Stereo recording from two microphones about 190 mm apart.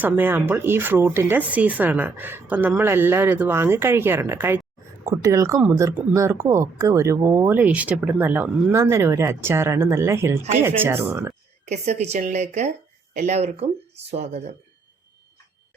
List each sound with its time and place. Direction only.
0.0 s speech: 10° right (ahead or behind)
11.7 s speech: 35° right (ahead or behind)